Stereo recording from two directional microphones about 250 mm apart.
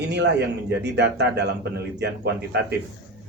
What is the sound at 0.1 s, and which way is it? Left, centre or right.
A man's voice, right.